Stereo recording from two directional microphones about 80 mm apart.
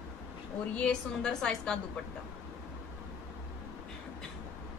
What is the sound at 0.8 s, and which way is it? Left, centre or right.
A woman's voice, centre.